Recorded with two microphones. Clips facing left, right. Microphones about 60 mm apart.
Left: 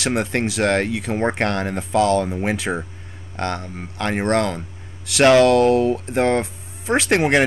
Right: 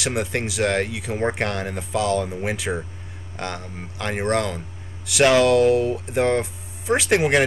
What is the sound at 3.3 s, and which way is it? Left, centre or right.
Speech, centre.